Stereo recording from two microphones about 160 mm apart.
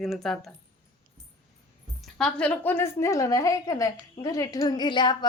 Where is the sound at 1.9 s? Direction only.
5° left (ahead or behind).